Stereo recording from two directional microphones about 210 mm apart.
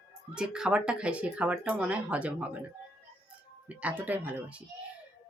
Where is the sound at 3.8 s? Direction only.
5° right (ahead or behind).